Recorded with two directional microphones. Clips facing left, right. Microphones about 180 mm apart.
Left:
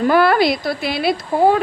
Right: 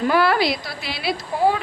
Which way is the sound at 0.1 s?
50° left (ahead or behind).